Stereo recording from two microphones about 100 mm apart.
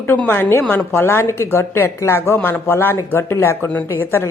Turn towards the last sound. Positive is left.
turn(degrees=25)  # may be behind; listen again after turning